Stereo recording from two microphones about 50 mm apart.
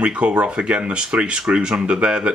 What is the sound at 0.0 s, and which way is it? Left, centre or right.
Speech, right.